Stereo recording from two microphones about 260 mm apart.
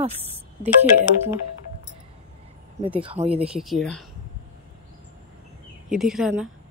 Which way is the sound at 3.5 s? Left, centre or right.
Centre.